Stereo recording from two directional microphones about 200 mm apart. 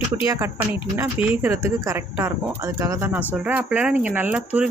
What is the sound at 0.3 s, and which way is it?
Speech, 15° right (ahead or behind).